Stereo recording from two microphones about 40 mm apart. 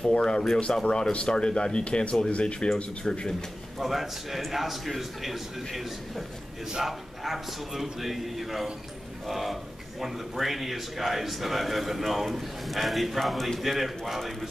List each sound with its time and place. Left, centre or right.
0.0 s speech: left
3.7 s speech: centre